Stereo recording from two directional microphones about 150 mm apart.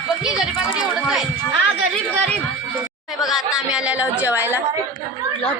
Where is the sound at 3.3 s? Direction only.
5° right (ahead or behind).